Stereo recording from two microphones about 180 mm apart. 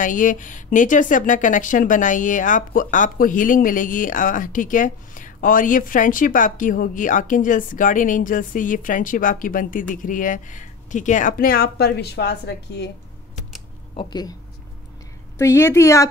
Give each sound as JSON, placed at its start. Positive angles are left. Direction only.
{"t": 0.0, "sound": "a woman's voice", "side_deg": 45}
{"t": 13.9, "sound": "speech", "side_deg": 20}
{"t": 15.3, "sound": "a woman's voice", "side_deg": 15}